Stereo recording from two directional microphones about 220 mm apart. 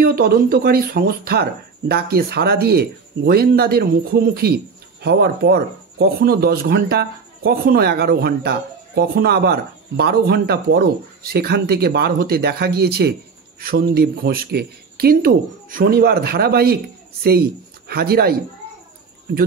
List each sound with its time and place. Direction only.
0.0 s speech: 45° right (ahead or behind)